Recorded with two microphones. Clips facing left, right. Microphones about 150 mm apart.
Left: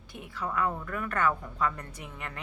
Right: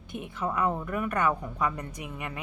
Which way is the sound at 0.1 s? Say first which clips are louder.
Right 3 dB; 20° right (ahead or behind).